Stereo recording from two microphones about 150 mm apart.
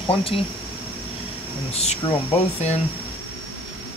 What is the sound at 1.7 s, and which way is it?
Speech, 45° left (ahead or behind).